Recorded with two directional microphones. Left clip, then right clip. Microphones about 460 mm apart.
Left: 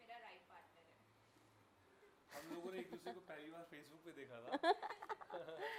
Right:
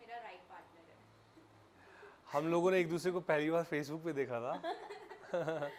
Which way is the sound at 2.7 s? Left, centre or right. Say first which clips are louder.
Right 18 dB; right.